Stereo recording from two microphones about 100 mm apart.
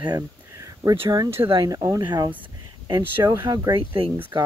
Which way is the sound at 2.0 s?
50° right (ahead or behind).